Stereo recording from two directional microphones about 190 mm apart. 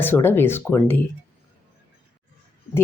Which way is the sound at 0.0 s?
10° left (ahead or behind).